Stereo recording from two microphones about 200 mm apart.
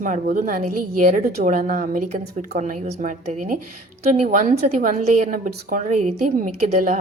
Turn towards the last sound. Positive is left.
turn(degrees=-40)  # may be behind; listen again after turning